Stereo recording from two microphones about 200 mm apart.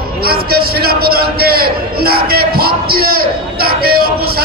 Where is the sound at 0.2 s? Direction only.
50° right (ahead or behind).